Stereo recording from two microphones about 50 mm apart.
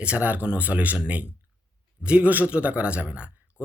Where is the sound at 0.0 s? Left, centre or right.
Right.